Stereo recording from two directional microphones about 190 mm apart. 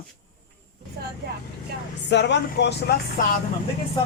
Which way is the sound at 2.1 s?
65° left (ahead or behind).